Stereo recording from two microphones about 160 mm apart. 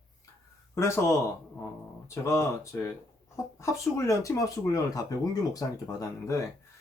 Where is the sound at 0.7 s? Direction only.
15° left (ahead or behind).